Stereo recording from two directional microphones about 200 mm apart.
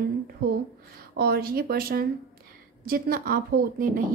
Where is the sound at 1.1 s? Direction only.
50° right (ahead or behind).